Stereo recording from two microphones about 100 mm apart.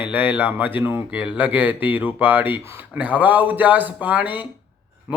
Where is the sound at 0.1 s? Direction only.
20° right (ahead or behind).